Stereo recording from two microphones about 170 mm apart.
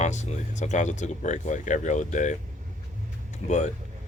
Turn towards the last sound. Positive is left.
turn(degrees=45)  # may be behind; listen again after turning